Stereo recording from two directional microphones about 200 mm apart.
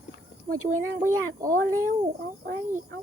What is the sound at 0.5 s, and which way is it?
Speech, 90° right.